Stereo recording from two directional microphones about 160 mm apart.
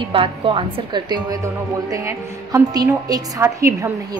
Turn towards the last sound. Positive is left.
turn(degrees=-20)  # may be behind; listen again after turning